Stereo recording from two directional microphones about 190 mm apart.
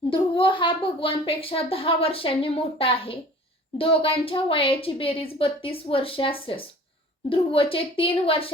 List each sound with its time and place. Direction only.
0.1 s speech: 25° left (ahead or behind)